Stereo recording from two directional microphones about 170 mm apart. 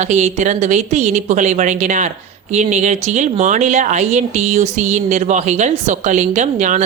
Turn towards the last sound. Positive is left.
turn(degrees=-45)  # may be behind; listen again after turning